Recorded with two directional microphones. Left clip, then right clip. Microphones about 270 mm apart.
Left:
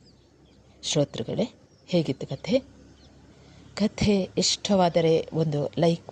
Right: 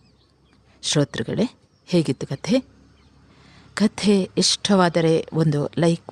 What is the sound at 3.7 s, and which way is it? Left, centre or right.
Speech, right.